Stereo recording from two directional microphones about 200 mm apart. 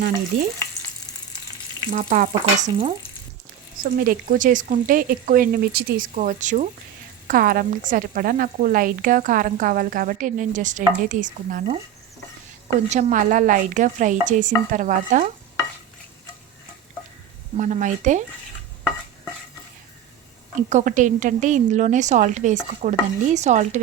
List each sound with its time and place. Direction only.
1.9 s speech: 40° right (ahead or behind)
2.6 s frying: 30° right (ahead or behind)
3.8 s speech: 45° right (ahead or behind)
12.9 s speech: 40° right (ahead or behind)
17.6 s speech: 40° right (ahead or behind)
20.6 s speech: 40° right (ahead or behind)